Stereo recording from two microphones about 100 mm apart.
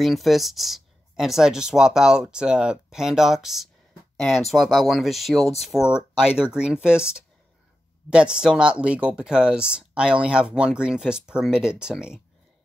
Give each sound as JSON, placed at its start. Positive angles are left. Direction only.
{"t": 0.0, "sound": "speech", "side_deg": 0}